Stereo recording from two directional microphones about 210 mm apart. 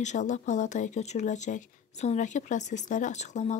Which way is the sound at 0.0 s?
35° left (ahead or behind).